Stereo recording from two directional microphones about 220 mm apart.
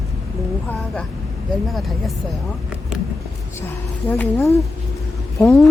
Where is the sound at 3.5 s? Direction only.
10° left (ahead or behind).